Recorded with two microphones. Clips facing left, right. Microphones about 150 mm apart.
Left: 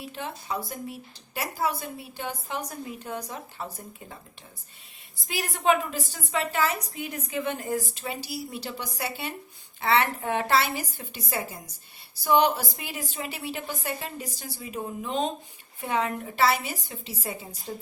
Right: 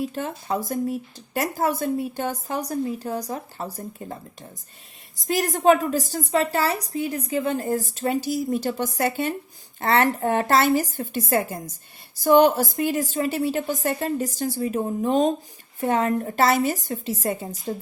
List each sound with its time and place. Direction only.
0.0 s speech: 45° right (ahead or behind)
5.2 s a woman's voice: 40° right (ahead or behind)